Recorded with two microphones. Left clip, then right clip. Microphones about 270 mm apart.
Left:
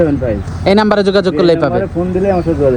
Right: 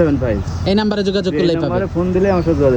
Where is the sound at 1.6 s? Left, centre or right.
Centre.